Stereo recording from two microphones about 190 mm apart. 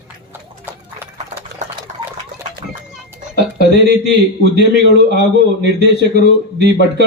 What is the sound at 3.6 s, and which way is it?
A man's voice, 65° right (ahead or behind).